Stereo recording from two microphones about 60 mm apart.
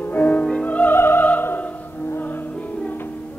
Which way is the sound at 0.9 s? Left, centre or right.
Left.